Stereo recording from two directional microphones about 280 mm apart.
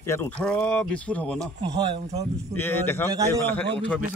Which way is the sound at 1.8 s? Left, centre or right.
Centre.